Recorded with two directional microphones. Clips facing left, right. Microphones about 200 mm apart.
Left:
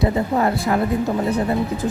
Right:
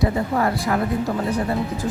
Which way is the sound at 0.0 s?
25° left (ahead or behind).